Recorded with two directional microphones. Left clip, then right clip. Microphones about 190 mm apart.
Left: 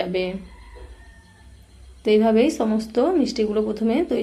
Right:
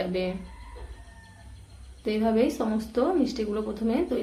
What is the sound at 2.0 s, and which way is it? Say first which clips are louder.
A woman's voice: left 8 dB; 25° left (ahead or behind).